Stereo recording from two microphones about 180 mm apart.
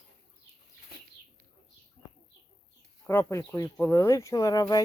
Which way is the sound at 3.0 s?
15° left (ahead or behind).